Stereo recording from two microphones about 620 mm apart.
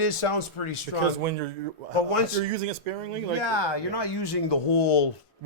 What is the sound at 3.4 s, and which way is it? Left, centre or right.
Speech, left.